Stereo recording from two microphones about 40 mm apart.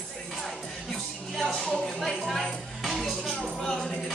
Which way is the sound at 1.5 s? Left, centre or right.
Centre.